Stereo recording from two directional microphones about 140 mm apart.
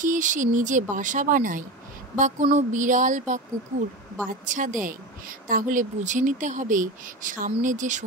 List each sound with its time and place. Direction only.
0.0 s speech: 65° right (ahead or behind)
2.5 s a sound: 65° right (ahead or behind)
4.3 s speech: 65° right (ahead or behind)